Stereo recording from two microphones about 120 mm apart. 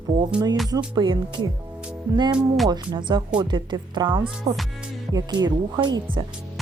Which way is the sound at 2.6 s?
35° right (ahead or behind).